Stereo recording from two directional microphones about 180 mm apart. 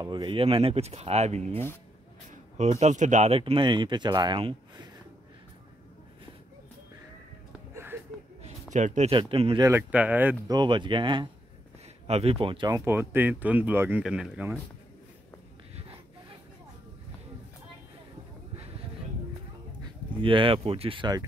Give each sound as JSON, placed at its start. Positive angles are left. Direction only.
{"t": 0.0, "sound": "speech", "side_deg": -25}
{"t": 7.7, "sound": "a sound", "side_deg": -10}
{"t": 8.4, "sound": "a sound", "side_deg": -40}
{"t": 9.1, "sound": "speech", "side_deg": -30}
{"t": 9.7, "sound": "speech", "side_deg": -10}
{"t": 10.5, "sound": "speech", "side_deg": -25}
{"t": 19.8, "sound": "speech", "side_deg": -30}